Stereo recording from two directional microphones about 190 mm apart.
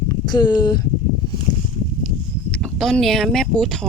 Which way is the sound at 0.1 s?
20° left (ahead or behind).